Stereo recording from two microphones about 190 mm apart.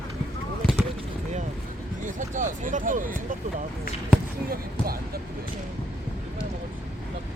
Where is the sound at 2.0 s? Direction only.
40° right (ahead or behind).